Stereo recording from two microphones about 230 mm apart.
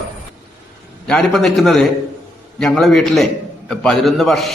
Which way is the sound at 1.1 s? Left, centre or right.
Centre.